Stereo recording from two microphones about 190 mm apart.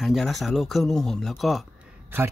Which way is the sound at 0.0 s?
Centre (ahead or behind).